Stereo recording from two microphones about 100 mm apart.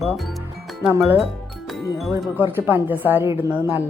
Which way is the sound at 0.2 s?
Centre (ahead or behind).